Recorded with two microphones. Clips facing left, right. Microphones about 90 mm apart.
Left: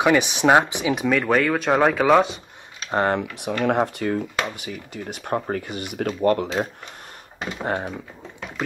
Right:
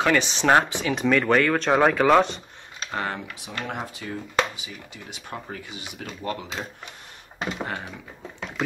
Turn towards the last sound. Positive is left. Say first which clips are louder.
# left 7 dB
turn(degrees=35)  # may be behind; listen again after turning